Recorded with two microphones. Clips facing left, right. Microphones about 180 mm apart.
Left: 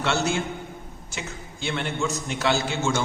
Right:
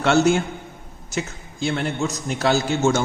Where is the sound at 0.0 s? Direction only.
50° right (ahead or behind).